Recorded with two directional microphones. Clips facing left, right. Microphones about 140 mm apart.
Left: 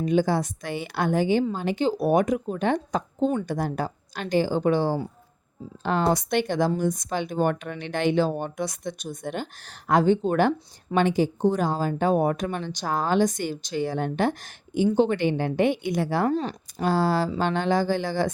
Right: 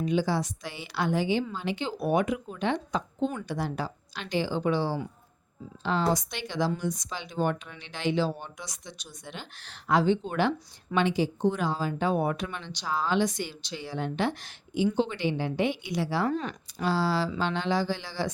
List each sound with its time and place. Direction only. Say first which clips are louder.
0.0 s speech: left 4 dB; 50° left (ahead or behind)
16.3 s speech: left 5 dB; 35° left (ahead or behind)
16.8 s speech: left 4 dB; 50° left (ahead or behind)